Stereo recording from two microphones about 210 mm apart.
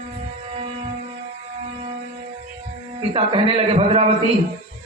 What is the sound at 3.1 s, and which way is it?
A man's voice, 25° right (ahead or behind).